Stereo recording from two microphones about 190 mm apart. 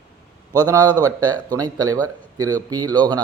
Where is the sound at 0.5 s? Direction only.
20° right (ahead or behind).